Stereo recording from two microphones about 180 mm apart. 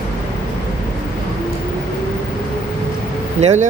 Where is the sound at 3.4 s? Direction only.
40° right (ahead or behind).